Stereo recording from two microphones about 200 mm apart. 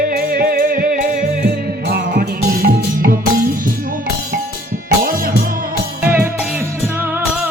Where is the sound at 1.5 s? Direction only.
55° right (ahead or behind).